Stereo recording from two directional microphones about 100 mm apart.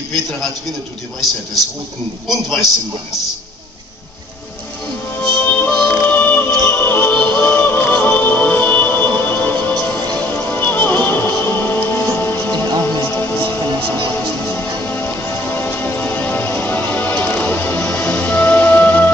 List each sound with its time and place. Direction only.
1.2 s a man's voice: centre (ahead or behind)
5.1 s music: 20° left (ahead or behind)